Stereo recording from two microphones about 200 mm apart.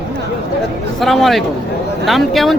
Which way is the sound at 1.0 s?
Centre (ahead or behind).